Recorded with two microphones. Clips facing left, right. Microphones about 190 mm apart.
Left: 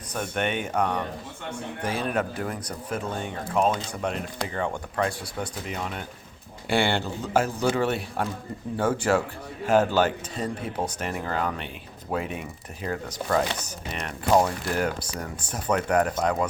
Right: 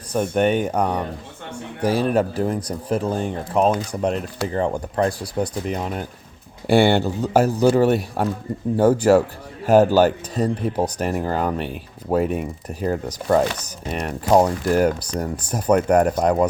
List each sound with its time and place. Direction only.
0.1 s speech: 35° right (ahead or behind)